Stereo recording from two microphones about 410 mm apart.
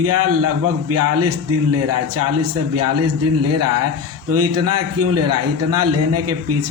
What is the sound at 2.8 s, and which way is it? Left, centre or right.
Speech, right.